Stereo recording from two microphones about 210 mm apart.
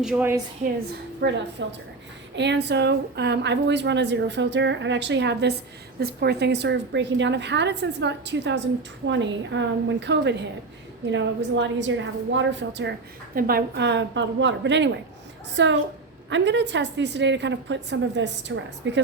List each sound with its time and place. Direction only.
0.0 s a woman's voice: 5° right (ahead or behind)
1.2 s a woman's voice: 55° right (ahead or behind)
13.3 s a woman's voice: 45° right (ahead or behind)